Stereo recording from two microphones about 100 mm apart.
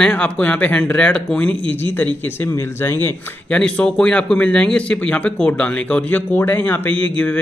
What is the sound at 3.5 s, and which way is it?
Speech, 10° left (ahead or behind).